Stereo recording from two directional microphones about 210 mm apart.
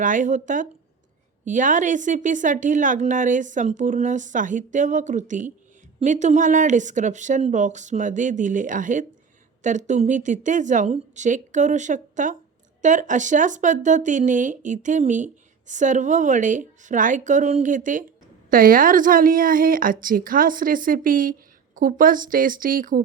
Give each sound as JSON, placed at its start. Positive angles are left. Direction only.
{"t": 0.0, "sound": "speech", "side_deg": -40}